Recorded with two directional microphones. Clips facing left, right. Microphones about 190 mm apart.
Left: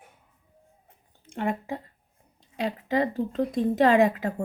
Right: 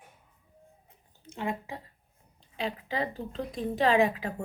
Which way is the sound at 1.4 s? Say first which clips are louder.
Left 5 dB; 55° left (ahead or behind).